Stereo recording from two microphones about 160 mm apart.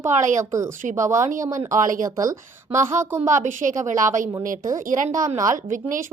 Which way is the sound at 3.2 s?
50° right (ahead or behind).